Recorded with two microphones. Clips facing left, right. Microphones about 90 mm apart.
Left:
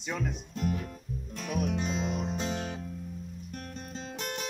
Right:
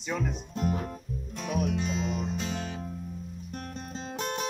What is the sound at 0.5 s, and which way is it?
Speech, 30° right (ahead or behind).